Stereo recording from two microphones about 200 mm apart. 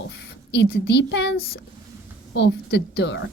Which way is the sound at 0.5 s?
60° left (ahead or behind).